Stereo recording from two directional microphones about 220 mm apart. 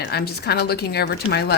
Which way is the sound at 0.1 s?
45° left (ahead or behind).